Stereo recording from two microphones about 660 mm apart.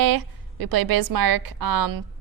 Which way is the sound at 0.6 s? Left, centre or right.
Right.